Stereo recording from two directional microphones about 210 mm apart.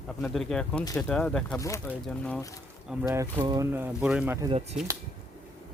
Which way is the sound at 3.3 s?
20° right (ahead or behind).